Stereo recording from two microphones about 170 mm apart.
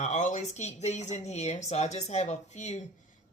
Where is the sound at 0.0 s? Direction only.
45° left (ahead or behind).